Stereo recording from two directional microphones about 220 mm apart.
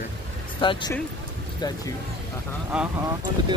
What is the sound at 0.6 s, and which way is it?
Speech, 20° left (ahead or behind).